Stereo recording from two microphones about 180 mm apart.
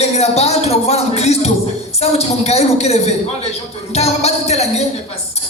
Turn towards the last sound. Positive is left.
turn(degrees=35)  # may be behind; listen again after turning